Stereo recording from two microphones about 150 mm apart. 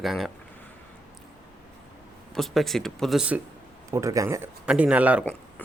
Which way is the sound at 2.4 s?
Centre (ahead or behind).